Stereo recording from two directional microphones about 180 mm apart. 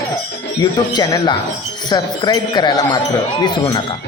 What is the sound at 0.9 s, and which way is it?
Music, 25° left (ahead or behind).